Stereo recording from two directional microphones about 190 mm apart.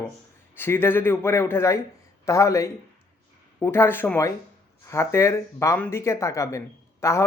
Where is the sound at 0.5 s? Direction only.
10° left (ahead or behind).